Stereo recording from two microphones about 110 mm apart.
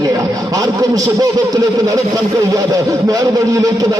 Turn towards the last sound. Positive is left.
turn(degrees=-30)  # may be behind; listen again after turning